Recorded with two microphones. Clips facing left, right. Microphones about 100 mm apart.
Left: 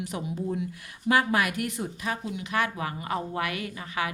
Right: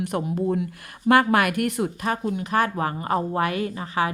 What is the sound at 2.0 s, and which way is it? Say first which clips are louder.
A woman's voice: right 6 dB; 45° right (ahead or behind).